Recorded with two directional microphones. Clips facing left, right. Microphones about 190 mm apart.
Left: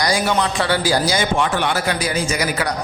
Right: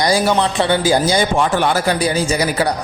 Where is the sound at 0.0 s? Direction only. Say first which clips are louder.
Right 4 dB; 30° right (ahead or behind).